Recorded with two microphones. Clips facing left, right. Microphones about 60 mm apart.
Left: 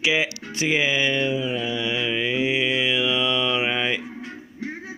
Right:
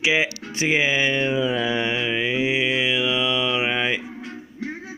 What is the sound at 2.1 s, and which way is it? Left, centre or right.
Mantra, centre.